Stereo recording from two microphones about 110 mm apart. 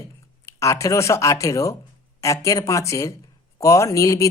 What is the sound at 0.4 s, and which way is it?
A man's voice, 25° left (ahead or behind).